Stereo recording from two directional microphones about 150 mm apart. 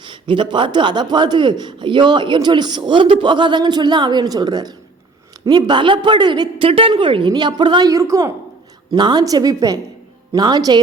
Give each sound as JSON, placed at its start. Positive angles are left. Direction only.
{"t": 0.0, "sound": "a woman's voice", "side_deg": -30}